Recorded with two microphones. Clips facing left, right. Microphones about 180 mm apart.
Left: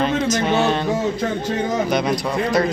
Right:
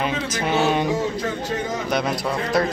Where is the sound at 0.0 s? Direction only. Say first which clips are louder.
Left 5 dB; 5° right (ahead or behind).